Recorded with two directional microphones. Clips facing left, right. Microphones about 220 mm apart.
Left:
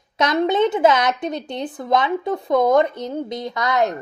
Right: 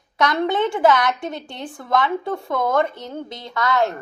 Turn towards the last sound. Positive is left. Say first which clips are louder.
# left 1 dB
turn(degrees=20)  # may be behind; listen again after turning